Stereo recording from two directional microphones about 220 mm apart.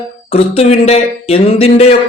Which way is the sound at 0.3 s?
25° left (ahead or behind).